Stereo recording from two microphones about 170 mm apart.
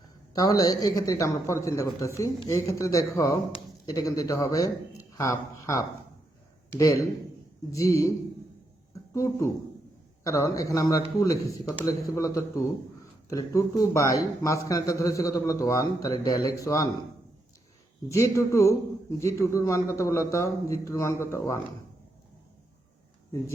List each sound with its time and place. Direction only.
0.3 s a man's voice: 20° left (ahead or behind)
7.7 s a man's voice: 20° left (ahead or behind)
9.1 s a man's voice: 15° left (ahead or behind)
18.1 s a man's voice: 20° left (ahead or behind)